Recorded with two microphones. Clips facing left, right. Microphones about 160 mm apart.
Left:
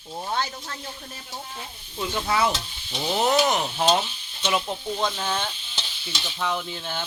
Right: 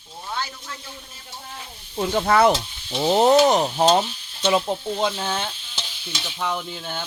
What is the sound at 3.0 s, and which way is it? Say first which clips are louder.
Speech: right 6 dB; 30° right (ahead or behind).